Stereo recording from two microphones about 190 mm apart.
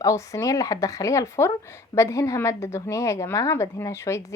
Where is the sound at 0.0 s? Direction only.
15° left (ahead or behind).